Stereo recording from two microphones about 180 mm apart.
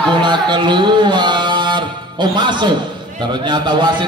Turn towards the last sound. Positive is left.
turn(degrees=-25)  # may be behind; listen again after turning